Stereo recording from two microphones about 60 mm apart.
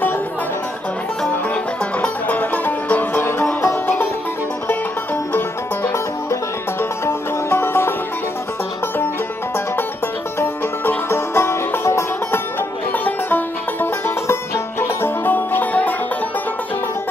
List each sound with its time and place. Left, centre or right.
1.5 s music: left
6.8 s music: left
10.4 s music: left
12.9 s music: left
14.2 s music: left